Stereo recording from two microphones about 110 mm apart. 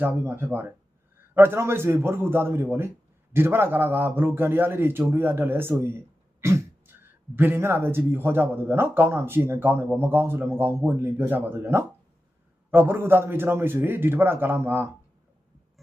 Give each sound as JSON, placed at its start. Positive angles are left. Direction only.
{"t": 0.0, "sound": "a man's voice", "side_deg": -20}
{"t": 6.4, "sound": "throat clearing", "side_deg": -25}
{"t": 7.3, "sound": "a man's voice", "side_deg": -20}